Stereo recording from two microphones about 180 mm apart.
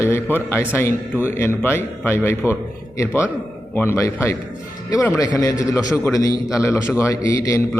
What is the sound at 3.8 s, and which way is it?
A man's voice, 15° left (ahead or behind).